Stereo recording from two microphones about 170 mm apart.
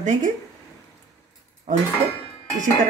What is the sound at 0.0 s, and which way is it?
Speech, 45° right (ahead or behind).